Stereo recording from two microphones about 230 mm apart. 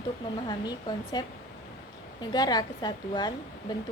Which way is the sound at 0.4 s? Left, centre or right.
Centre.